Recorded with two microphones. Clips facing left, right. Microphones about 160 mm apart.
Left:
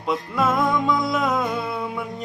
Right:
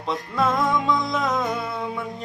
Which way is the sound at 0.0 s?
5° left (ahead or behind).